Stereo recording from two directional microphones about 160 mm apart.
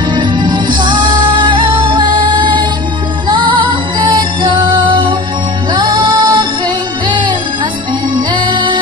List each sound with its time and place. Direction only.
0.1 s music: 30° right (ahead or behind)